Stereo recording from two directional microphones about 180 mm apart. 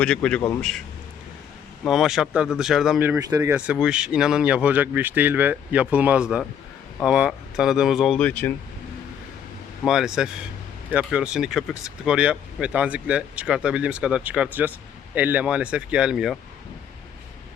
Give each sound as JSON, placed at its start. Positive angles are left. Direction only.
{"t": 0.0, "sound": "speech", "side_deg": 5}
{"t": 1.8, "sound": "speech", "side_deg": 0}
{"t": 3.2, "sound": "speech", "side_deg": -20}
{"t": 3.5, "sound": "speech", "side_deg": -5}
{"t": 9.8, "sound": "speech", "side_deg": -5}